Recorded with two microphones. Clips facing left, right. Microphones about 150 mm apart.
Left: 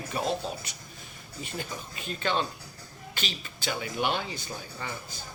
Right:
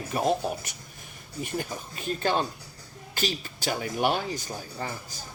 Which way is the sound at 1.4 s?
50° right (ahead or behind).